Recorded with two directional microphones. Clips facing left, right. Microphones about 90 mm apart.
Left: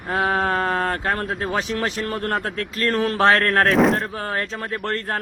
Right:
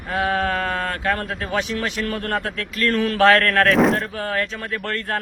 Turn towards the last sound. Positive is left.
turn(degrees=35)  # may be behind; listen again after turning